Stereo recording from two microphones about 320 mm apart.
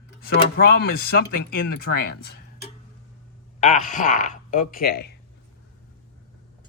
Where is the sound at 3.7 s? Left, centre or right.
Left.